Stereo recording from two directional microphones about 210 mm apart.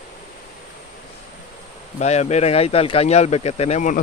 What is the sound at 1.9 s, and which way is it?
Speech, 30° left (ahead or behind).